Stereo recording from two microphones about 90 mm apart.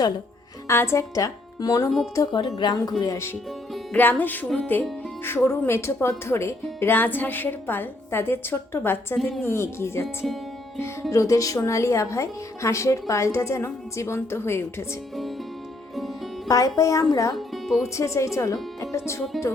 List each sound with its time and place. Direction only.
0.7 s speech: 30° left (ahead or behind)
1.1 s speech: 40° left (ahead or behind)
2.6 s speech: 55° left (ahead or behind)
3.0 s a woman's voice: 35° left (ahead or behind)
3.9 s speech: 20° left (ahead or behind)
9.1 s a woman's voice: centre (ahead or behind)
9.4 s a woman's voice: 30° left (ahead or behind)
16.5 s a woman's voice: 40° left (ahead or behind)
17.3 s speech: centre (ahead or behind)
17.9 s a woman's voice: 35° left (ahead or behind)